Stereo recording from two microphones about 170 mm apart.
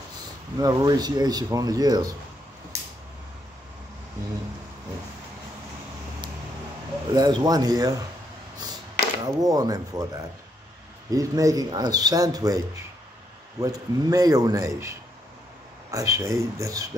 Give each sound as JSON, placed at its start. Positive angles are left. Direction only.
{"t": 0.6, "sound": "speech", "side_deg": -20}
{"t": 7.2, "sound": "speech", "side_deg": -25}
{"t": 9.2, "sound": "speech", "side_deg": -20}
{"t": 11.1, "sound": "speech", "side_deg": -20}